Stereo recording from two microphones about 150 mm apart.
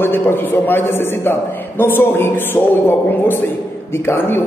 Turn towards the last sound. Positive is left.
turn(degrees=15)  # may be behind; listen again after turning